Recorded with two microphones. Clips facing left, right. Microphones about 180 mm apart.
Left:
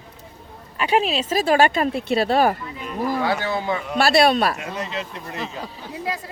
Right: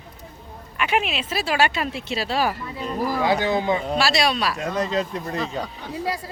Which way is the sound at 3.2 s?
15° right (ahead or behind).